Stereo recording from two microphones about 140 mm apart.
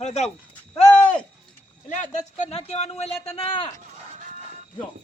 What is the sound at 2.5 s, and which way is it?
Speech, 50° left (ahead or behind).